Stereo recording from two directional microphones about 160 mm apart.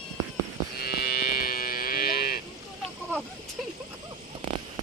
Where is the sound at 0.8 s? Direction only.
70° left (ahead or behind).